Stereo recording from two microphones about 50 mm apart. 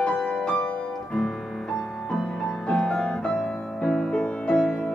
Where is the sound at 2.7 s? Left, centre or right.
Centre.